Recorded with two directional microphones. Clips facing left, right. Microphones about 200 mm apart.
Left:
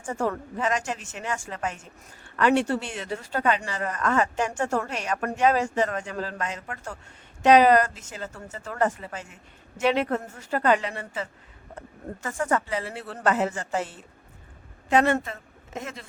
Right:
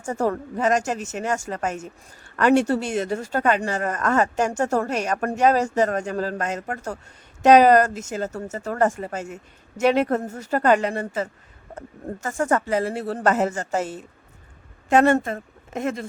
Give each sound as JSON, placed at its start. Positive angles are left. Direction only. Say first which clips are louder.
{"t": 0.0, "sound": "speech", "louder": "right 4 dB", "side_deg": -40}
{"t": 12.2, "sound": "a woman's voice", "louder": "right 4 dB", "side_deg": -45}